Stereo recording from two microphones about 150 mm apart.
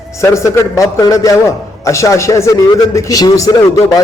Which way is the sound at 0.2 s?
20° left (ahead or behind).